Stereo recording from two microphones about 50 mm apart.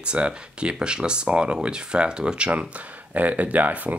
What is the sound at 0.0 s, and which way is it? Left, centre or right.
Speech, right.